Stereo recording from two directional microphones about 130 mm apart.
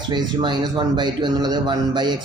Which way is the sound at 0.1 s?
35° right (ahead or behind).